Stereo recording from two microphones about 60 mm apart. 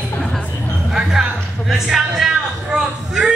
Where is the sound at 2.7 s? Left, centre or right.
Centre.